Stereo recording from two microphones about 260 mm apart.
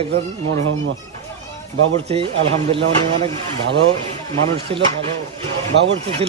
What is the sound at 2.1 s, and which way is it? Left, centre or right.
A man's voice, right.